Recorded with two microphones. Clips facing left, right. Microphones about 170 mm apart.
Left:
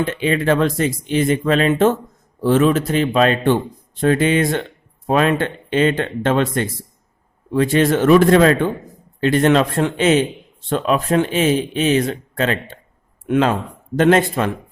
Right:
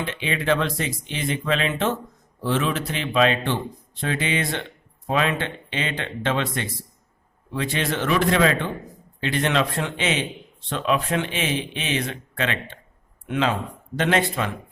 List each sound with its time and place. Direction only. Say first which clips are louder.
0.0 s speech: left 8 dB; 45° left (ahead or behind)